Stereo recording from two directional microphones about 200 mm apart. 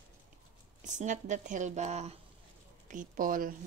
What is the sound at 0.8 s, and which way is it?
Speech, 40° right (ahead or behind).